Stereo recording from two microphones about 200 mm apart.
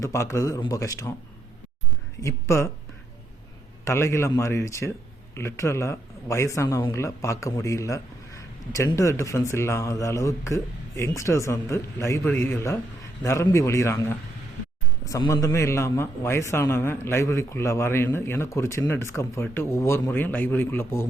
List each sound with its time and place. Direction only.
0.0 s speech: 15° left (ahead or behind)
2.2 s speech: 15° left (ahead or behind)
3.8 s speech: 15° left (ahead or behind)